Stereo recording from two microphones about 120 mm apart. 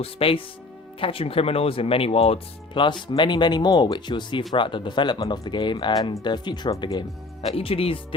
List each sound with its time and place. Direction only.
0.0 s speech: 50° left (ahead or behind)
7.5 s speech: 50° left (ahead or behind)